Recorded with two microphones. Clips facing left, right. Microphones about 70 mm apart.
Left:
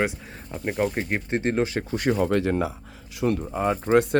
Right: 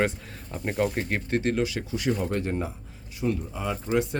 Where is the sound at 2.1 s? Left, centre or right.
Left.